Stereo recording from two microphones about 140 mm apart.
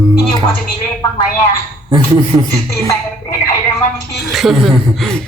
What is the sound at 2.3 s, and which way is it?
Speech, 15° right (ahead or behind).